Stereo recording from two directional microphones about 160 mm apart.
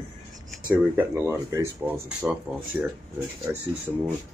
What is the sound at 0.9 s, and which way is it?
Speech, 15° right (ahead or behind).